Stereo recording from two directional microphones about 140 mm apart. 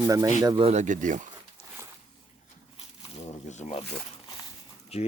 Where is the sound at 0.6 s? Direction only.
60° right (ahead or behind).